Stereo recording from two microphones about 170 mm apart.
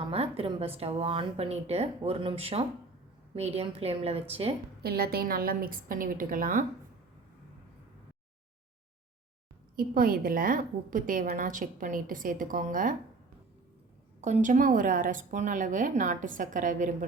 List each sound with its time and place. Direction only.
0.1 s speech: 35° right (ahead or behind)
4.8 s a woman's voice: 65° right (ahead or behind)
9.7 s a woman's voice: 55° right (ahead or behind)
14.2 s a woman's voice: 45° right (ahead or behind)